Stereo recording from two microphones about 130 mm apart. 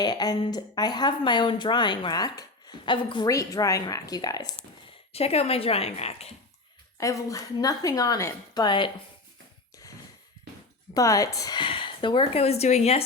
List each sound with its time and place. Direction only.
0.0 s speech: 30° left (ahead or behind)
3.2 s a woman's voice: 25° left (ahead or behind)
5.1 s a woman's voice: 50° left (ahead or behind)
7.0 s a woman's voice: 25° left (ahead or behind)
10.9 s speech: 25° left (ahead or behind); by 13.0 s 60° left (ahead or behind)